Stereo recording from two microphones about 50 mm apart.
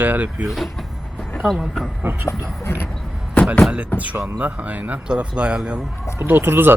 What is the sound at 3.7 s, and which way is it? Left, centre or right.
Speech, right.